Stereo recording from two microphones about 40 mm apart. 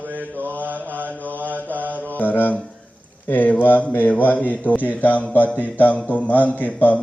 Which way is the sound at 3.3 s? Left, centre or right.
Left.